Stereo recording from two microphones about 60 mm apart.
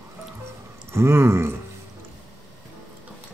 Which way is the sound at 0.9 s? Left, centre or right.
Right.